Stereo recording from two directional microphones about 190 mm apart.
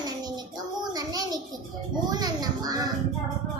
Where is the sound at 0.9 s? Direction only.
20° right (ahead or behind).